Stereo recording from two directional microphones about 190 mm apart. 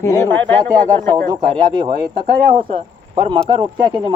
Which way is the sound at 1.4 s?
20° right (ahead or behind).